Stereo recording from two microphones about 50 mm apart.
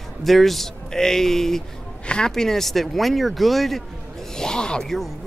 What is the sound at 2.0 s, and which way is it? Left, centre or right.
Speech, centre.